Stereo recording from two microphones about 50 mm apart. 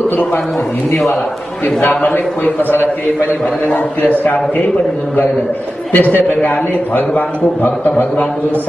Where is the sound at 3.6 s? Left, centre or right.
Left.